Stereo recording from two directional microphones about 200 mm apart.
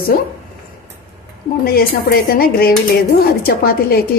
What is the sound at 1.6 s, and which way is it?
A woman's voice, 50° left (ahead or behind).